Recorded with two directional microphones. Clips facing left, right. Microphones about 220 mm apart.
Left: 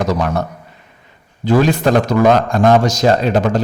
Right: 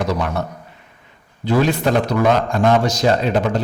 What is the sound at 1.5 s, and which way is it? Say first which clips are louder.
A man's voice: left 4 dB; 45° left (ahead or behind).